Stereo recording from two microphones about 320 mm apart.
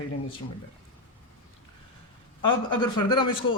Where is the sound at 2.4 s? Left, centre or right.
Centre.